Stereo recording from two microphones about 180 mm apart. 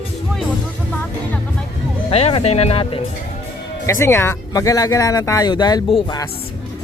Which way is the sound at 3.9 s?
15° left (ahead or behind).